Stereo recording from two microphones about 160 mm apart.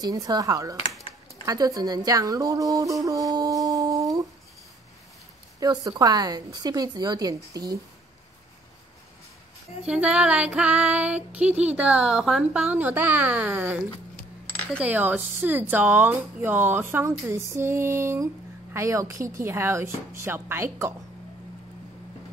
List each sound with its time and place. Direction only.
0.0 s a woman's voice: 25° right (ahead or behind)
5.6 s a woman's voice: 25° right (ahead or behind)
9.8 s speech: 5° right (ahead or behind)